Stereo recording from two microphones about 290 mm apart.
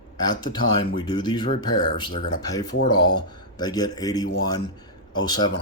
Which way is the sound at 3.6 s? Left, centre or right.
Centre.